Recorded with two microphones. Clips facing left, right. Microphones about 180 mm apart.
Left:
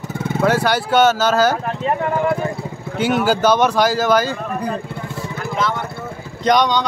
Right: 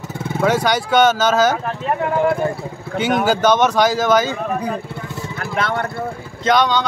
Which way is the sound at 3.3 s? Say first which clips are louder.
Even; 10° left (ahead or behind).